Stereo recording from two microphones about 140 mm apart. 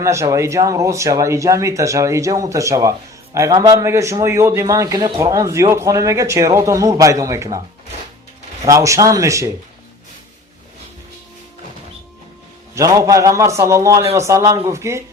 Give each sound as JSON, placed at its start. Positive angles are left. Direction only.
{"t": 0.0, "sound": "speech", "side_deg": -20}
{"t": 8.6, "sound": "speech", "side_deg": -20}
{"t": 12.7, "sound": "speech", "side_deg": -25}